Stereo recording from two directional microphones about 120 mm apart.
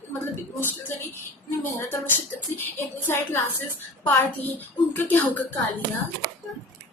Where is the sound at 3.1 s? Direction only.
20° left (ahead or behind).